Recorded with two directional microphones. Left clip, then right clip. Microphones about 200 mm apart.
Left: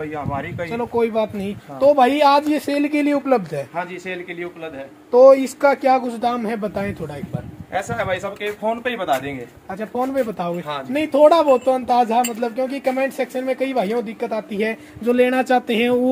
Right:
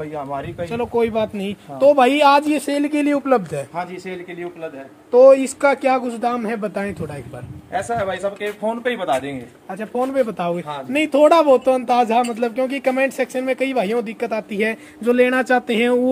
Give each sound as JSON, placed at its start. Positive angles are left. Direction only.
{"t": 0.1, "sound": "a man's voice", "side_deg": -30}
{"t": 0.7, "sound": "speech", "side_deg": -10}
{"t": 3.7, "sound": "a man's voice", "side_deg": -25}
{"t": 5.1, "sound": "speech", "side_deg": -5}
{"t": 7.7, "sound": "speech", "side_deg": -20}